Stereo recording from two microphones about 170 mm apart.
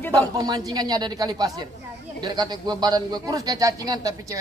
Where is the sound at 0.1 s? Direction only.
20° right (ahead or behind).